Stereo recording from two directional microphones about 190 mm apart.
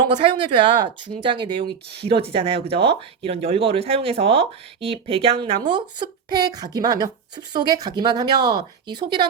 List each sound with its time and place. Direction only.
0.0 s speech: 25° right (ahead or behind)